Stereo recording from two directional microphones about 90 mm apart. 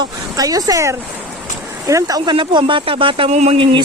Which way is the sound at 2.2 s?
65° right (ahead or behind).